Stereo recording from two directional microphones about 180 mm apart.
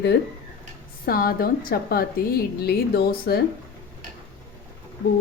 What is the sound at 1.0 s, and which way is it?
A woman's voice, 55° left (ahead or behind).